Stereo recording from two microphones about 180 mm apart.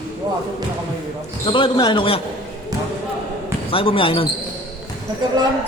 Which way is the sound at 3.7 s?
30° left (ahead or behind).